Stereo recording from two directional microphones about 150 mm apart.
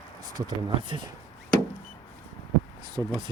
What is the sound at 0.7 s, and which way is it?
Speech, 30° right (ahead or behind).